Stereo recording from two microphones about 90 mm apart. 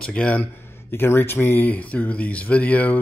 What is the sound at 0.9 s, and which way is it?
Speech, 25° left (ahead or behind).